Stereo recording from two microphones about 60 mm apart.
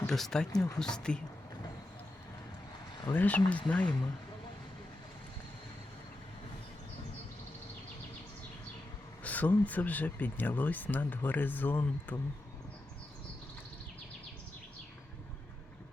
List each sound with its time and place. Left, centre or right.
0.1 s speech: centre
3.1 s speech: left
9.2 s speech: left